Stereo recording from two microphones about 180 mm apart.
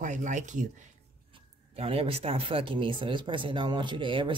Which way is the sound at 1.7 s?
30° right (ahead or behind).